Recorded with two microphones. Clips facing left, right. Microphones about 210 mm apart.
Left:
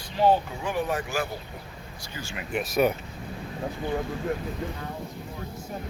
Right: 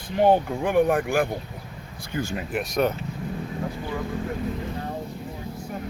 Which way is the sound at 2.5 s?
5° left (ahead or behind).